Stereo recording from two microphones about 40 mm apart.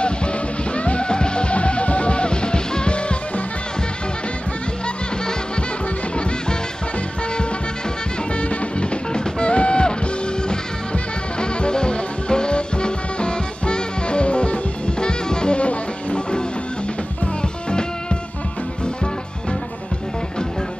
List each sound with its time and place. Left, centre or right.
0.7 s music: left
8.4 s music: left
11.3 s music: left